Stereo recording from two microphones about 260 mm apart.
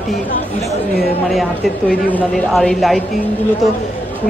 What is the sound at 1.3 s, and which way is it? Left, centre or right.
Speech, centre.